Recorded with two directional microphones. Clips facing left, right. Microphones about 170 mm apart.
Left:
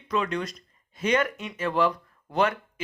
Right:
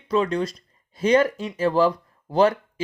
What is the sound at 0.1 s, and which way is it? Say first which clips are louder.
Speech: right 6 dB; 30° right (ahead or behind).